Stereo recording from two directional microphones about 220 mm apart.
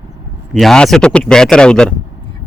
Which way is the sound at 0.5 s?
Centre (ahead or behind).